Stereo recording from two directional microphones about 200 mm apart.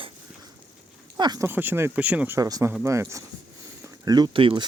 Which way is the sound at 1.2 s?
20° right (ahead or behind).